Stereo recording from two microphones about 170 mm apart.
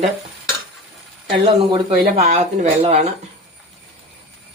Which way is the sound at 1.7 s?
40° right (ahead or behind).